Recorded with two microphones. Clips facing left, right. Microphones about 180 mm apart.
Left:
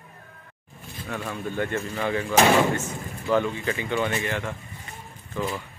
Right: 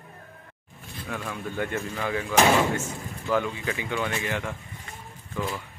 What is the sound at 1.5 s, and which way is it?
Speech, 10° right (ahead or behind).